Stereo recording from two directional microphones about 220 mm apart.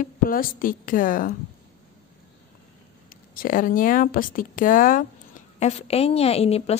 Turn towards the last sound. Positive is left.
turn(degrees=30)  # may be behind; listen again after turning